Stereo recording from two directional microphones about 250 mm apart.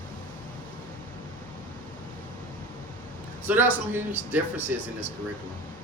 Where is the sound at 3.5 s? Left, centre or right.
Centre.